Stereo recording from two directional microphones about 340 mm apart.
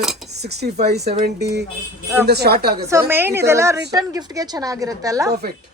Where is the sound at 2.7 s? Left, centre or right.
Centre.